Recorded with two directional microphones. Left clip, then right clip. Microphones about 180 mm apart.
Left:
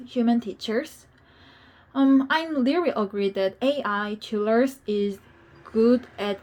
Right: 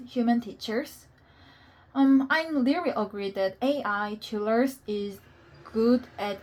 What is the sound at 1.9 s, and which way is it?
Speech, 30° left (ahead or behind).